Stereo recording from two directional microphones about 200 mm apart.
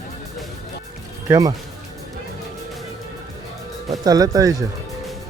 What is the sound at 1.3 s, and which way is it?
Speech, 15° right (ahead or behind).